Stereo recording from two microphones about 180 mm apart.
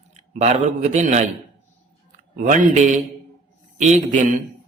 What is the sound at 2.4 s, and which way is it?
Mantra, 45° right (ahead or behind).